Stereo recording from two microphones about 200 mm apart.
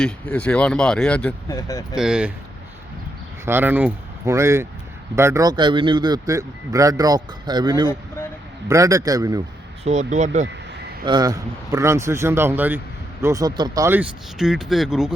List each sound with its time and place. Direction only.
0.0 s speech: 5° left (ahead or behind)
1.5 s speech: 15° left (ahead or behind)
2.0 s speech: 5° right (ahead or behind)
3.4 s a man's voice: 10° right (ahead or behind)
9.8 s speech: 35° right (ahead or behind)
11.0 s a man's voice: 20° right (ahead or behind); by 15.1 s centre (ahead or behind)